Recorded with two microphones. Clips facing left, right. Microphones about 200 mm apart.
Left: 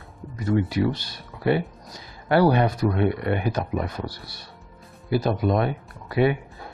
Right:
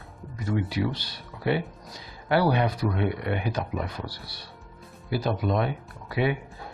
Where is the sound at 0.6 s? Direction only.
45° left (ahead or behind).